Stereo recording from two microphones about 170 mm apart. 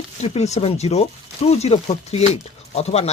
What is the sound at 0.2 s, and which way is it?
Speech, 40° left (ahead or behind).